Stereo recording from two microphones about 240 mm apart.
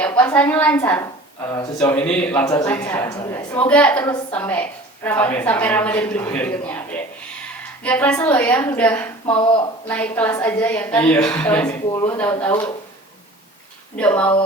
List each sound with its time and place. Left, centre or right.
0.1 s a woman's voice: centre
9.2 s speech: left
9.9 s a woman's voice: centre
13.9 s speech: centre